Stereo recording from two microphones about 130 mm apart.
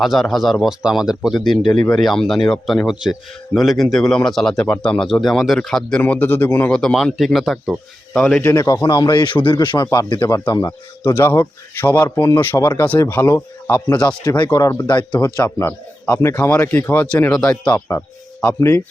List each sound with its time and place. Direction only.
0.0 s speech: centre (ahead or behind)
8.4 s speech: 25° left (ahead or behind)
12.0 s speech: 25° left (ahead or behind)
14.3 s speech: 35° left (ahead or behind)